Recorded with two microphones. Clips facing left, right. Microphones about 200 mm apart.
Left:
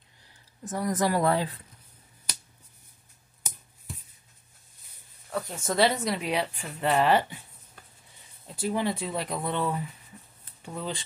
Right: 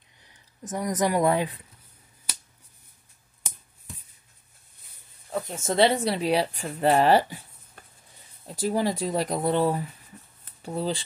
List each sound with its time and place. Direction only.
0.2 s speech: 20° right (ahead or behind)
5.3 s speech: 25° right (ahead or behind)
8.5 s speech: 40° right (ahead or behind)